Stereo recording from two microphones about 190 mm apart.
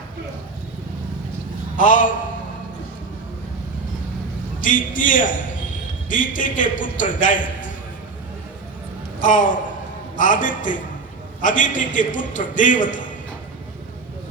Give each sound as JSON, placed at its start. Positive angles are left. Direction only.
{"t": 1.7, "sound": "a man's voice", "side_deg": 45}
{"t": 4.6, "sound": "a man's voice", "side_deg": 45}
{"t": 9.2, "sound": "a man's voice", "side_deg": 45}